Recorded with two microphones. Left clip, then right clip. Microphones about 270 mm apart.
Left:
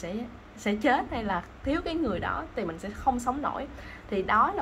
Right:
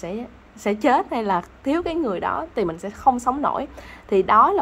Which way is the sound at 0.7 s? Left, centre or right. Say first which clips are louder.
Right 7 dB; centre.